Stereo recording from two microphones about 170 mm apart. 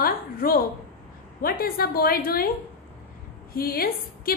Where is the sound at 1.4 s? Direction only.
60° left (ahead or behind).